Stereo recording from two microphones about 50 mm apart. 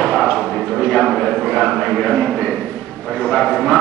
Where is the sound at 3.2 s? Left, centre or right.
Centre.